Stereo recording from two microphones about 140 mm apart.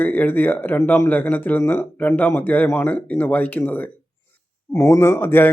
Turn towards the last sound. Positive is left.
turn(degrees=15)  # may be behind; listen again after turning